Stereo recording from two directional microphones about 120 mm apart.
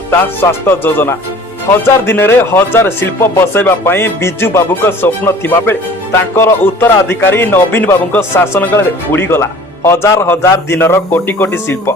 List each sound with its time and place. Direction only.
0.1 s speech: 20° left (ahead or behind)